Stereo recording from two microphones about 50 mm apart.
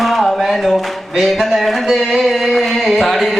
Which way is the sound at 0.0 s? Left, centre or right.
Centre.